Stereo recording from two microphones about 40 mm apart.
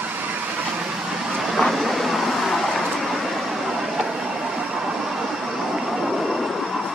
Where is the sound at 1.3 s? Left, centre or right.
Centre.